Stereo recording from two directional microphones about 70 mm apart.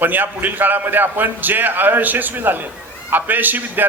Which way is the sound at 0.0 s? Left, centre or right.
Right.